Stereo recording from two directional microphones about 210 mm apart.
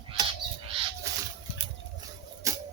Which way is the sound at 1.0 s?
15° right (ahead or behind).